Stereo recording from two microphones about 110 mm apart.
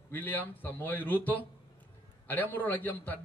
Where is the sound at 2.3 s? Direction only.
15° left (ahead or behind).